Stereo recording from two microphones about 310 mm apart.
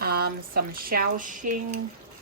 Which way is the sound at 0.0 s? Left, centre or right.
Right.